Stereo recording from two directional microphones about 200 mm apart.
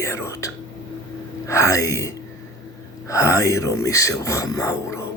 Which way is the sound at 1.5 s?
15° left (ahead or behind).